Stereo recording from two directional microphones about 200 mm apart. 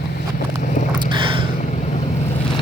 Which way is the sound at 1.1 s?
25° right (ahead or behind).